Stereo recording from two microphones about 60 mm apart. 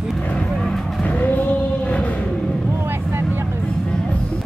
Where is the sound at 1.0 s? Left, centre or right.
Left.